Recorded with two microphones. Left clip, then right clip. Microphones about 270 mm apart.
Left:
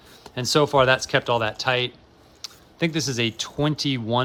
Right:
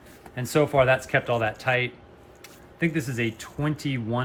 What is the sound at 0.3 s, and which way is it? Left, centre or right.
Speech, centre.